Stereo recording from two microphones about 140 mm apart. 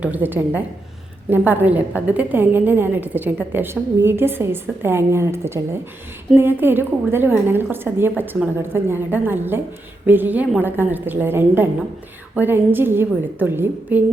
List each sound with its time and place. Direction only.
0.0 s a woman's voice: 10° right (ahead or behind)